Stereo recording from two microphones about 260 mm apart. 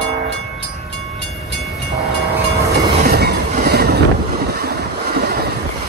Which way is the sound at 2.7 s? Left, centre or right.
Right.